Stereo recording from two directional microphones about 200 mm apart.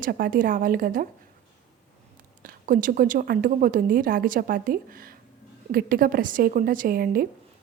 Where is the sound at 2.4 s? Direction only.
45° right (ahead or behind).